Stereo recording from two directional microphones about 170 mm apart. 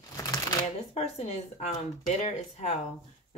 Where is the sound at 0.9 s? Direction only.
40° left (ahead or behind).